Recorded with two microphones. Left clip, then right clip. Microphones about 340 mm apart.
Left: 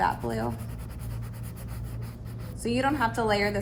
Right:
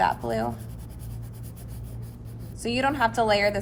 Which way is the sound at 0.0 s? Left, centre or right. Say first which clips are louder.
Right 3 dB; right.